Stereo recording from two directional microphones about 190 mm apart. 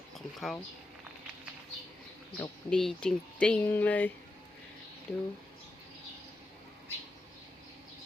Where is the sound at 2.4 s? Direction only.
5° left (ahead or behind).